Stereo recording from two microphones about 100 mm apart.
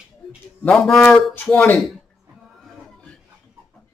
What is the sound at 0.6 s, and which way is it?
Speech, 5° left (ahead or behind).